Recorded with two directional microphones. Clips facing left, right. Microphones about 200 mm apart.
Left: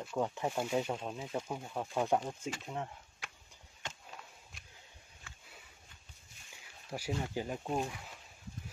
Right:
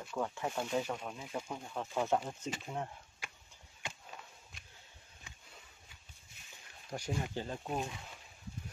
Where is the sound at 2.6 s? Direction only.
Centre (ahead or behind).